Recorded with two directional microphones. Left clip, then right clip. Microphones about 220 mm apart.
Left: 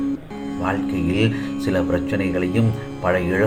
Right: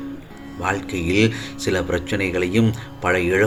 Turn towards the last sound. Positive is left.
turn(degrees=-35)  # may be behind; listen again after turning